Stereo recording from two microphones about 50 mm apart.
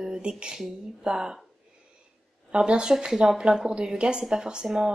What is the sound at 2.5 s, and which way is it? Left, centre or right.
A woman's voice, centre.